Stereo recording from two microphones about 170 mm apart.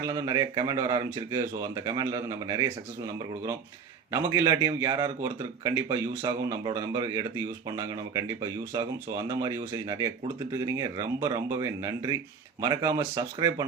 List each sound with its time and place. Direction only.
0.0 s speech: 20° right (ahead or behind)